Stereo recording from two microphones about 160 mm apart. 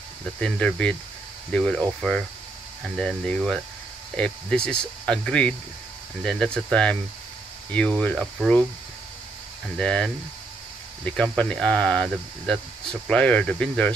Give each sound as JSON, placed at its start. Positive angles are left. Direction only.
{"t": 0.4, "sound": "speech", "side_deg": 5}
{"t": 9.8, "sound": "speech", "side_deg": 5}